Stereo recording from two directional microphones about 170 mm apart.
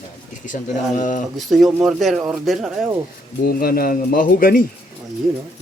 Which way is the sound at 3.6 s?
60° left (ahead or behind).